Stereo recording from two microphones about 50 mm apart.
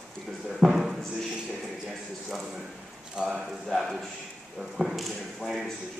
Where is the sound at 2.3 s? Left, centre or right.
Centre.